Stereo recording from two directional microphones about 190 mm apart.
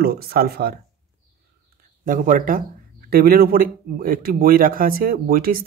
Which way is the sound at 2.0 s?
45° right (ahead or behind).